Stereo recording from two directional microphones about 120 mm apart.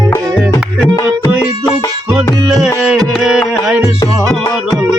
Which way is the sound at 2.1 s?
5° right (ahead or behind).